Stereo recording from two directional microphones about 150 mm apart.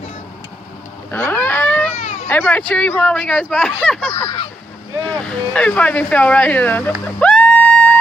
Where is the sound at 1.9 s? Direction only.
50° left (ahead or behind).